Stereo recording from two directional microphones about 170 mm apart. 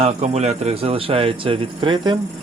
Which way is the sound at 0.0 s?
40° right (ahead or behind).